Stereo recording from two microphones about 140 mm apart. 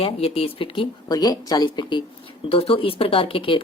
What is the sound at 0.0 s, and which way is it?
Speech, 45° left (ahead or behind).